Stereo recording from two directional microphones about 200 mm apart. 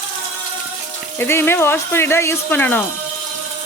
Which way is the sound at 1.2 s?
10° left (ahead or behind).